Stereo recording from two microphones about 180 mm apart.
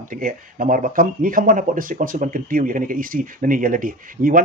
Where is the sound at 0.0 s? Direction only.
50° right (ahead or behind).